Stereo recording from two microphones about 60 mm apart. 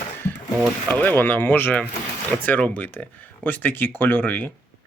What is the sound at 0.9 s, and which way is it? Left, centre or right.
Speech, left.